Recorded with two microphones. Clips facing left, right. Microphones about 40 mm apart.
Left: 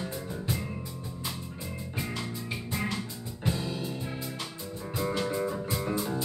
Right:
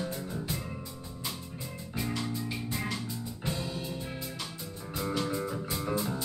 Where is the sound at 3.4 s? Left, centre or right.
Centre.